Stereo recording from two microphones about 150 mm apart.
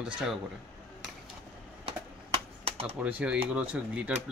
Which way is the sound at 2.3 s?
40° right (ahead or behind).